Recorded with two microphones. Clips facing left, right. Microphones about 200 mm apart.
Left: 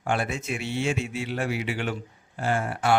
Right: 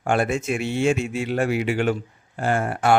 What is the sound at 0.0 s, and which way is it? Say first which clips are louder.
A man's voice: right 6 dB; 50° right (ahead or behind).